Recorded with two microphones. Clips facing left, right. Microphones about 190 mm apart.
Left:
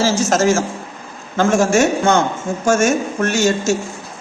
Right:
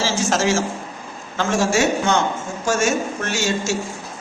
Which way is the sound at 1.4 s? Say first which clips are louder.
Left 5 dB; 50° left (ahead or behind).